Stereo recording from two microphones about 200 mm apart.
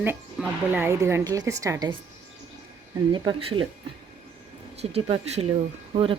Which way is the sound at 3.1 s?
25° right (ahead or behind).